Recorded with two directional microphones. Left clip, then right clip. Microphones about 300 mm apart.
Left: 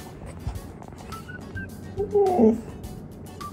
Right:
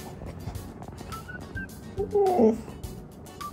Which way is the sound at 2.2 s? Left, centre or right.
Left.